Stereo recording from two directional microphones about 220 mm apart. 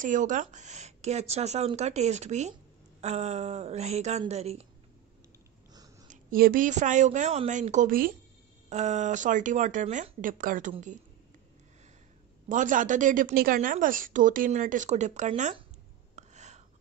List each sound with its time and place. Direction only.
0.0 s speech: 35° right (ahead or behind)
6.0 s a woman's voice: 40° right (ahead or behind)
12.4 s a woman's voice: 35° right (ahead or behind)
16.2 s a sound: 30° right (ahead or behind)